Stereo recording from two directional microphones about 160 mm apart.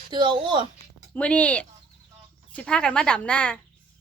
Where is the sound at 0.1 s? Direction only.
30° right (ahead or behind).